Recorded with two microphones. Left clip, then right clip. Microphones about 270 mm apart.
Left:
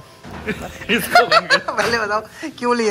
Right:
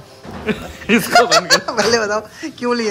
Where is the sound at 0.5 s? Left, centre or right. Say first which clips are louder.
Right 3 dB; right.